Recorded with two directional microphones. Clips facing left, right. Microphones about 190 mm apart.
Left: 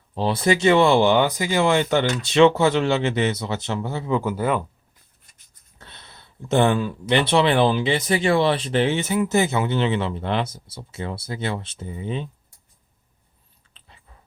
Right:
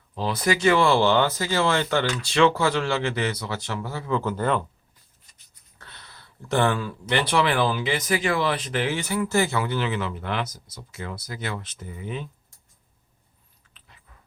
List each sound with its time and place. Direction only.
0.1 s speech: 30° left (ahead or behind)
4.2 s speech: 10° left (ahead or behind)
5.8 s speech: 20° left (ahead or behind)
13.7 s dog: 30° left (ahead or behind)